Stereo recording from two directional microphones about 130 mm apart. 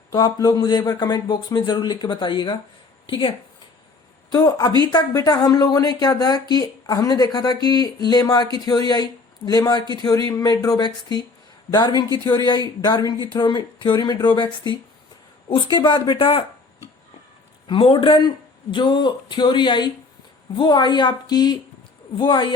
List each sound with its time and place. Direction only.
0.1 s speech: 30° left (ahead or behind)
17.7 s speech: 40° left (ahead or behind)